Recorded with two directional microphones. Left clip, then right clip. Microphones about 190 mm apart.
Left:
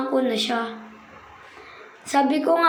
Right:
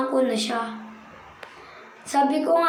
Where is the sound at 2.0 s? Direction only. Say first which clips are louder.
Left 1 dB; 20° left (ahead or behind).